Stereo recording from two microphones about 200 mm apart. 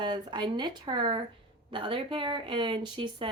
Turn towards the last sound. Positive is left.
turn(degrees=-25)  # may be behind; listen again after turning